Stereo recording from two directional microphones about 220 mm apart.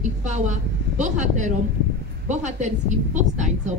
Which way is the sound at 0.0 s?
35° right (ahead or behind).